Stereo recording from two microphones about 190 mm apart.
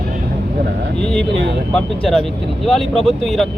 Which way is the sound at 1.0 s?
5° left (ahead or behind).